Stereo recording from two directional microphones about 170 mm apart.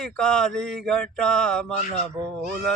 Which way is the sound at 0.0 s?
5° left (ahead or behind).